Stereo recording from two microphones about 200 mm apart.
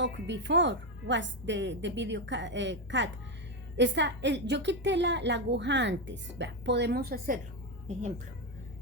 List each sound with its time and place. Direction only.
0.0 s a woman's voice: 60° right (ahead or behind)